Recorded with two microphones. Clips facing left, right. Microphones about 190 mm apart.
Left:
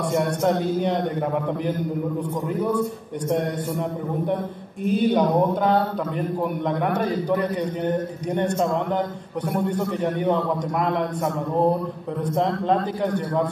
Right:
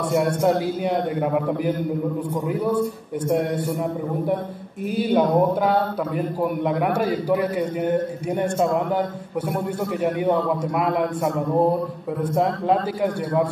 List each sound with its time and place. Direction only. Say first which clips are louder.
0.4 s a man's voice: right 1 dB; 5° right (ahead or behind)
2.4 s a man's voice: right 1 dB; 10° right (ahead or behind)
4.8 s a man's voice: even; 5° right (ahead or behind)
12.2 s a man's voice: right 1 dB; 10° right (ahead or behind)